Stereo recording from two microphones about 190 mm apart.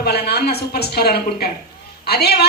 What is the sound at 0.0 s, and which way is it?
A woman's voice, 55° left (ahead or behind).